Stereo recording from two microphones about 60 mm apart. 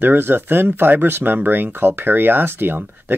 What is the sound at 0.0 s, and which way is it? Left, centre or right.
Speech, right.